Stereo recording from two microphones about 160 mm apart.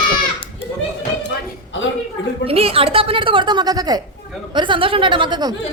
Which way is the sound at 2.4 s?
35° right (ahead or behind).